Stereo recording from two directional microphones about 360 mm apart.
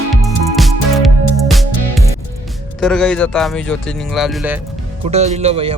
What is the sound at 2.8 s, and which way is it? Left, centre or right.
Speech, centre.